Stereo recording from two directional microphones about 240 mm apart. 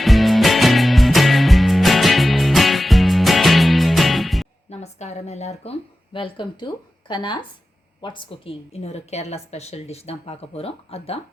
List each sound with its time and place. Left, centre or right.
0.0 s music: centre
4.7 s a sound: left
6.1 s a woman's voice: left